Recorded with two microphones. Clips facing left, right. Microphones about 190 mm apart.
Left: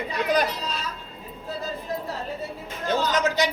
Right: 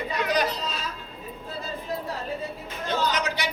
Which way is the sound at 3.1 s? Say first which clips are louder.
Left 5 dB; 45° left (ahead or behind).